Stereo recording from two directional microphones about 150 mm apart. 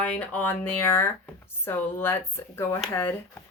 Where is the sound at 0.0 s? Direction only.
10° left (ahead or behind).